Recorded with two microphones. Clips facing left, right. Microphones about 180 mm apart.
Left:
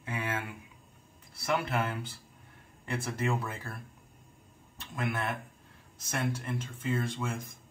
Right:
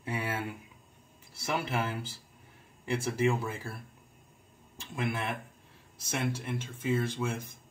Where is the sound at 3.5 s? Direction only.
10° right (ahead or behind).